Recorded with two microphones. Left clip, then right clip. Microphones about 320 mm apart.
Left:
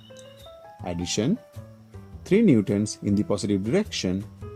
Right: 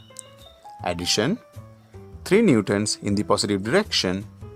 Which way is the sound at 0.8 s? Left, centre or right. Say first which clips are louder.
Right 5 dB; right.